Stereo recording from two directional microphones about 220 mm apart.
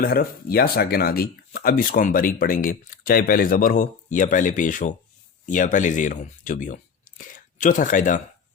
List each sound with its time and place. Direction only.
0.0 s speech: 40° left (ahead or behind)